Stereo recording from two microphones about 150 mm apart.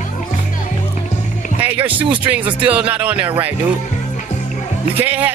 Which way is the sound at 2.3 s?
10° right (ahead or behind).